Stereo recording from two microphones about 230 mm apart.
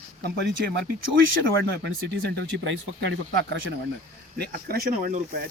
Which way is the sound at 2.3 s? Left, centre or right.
Right.